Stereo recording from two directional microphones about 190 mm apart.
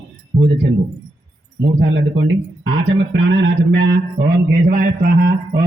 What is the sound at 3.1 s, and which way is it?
A man's voice, 75° right (ahead or behind).